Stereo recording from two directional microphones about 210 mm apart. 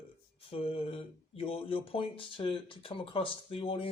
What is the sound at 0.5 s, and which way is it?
Speech, 25° left (ahead or behind).